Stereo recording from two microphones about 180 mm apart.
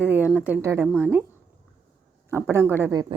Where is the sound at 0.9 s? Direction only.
Centre (ahead or behind).